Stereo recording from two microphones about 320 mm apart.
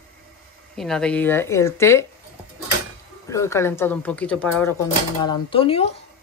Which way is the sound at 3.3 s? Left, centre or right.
Centre.